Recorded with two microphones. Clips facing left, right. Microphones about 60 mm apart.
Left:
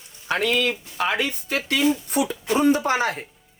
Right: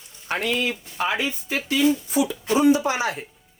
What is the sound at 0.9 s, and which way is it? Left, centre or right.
Speech, left.